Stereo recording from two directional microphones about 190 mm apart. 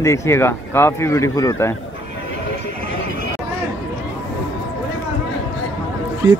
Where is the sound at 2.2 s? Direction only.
70° left (ahead or behind).